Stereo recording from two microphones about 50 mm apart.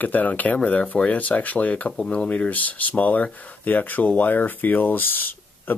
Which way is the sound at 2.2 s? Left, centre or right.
Left.